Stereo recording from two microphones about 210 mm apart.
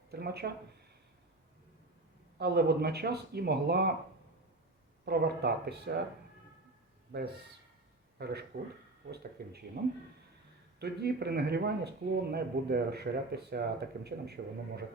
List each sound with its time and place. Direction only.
0.1 s speech: 50° right (ahead or behind)
2.4 s speech: 50° right (ahead or behind)
5.0 s speech: 50° right (ahead or behind)
7.1 s speech: 55° right (ahead or behind)